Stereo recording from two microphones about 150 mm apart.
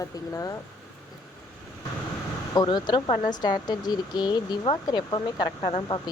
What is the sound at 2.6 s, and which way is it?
Speech, 30° left (ahead or behind).